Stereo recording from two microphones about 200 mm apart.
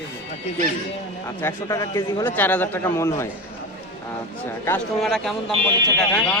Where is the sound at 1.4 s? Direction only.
15° left (ahead or behind).